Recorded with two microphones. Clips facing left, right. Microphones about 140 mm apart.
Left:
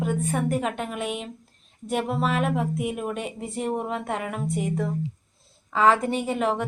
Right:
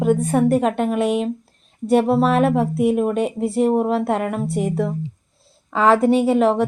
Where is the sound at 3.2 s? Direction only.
70° right (ahead or behind).